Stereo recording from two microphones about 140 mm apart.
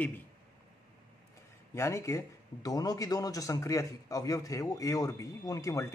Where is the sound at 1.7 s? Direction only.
20° left (ahead or behind).